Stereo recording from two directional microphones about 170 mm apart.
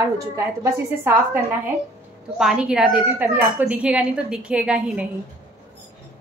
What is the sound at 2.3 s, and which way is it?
A woman's voice, 5° right (ahead or behind).